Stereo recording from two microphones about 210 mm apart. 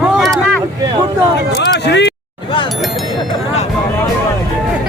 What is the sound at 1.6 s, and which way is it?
Speech, 55° left (ahead or behind).